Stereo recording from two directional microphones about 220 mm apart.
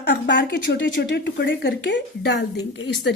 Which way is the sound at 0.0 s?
55° left (ahead or behind).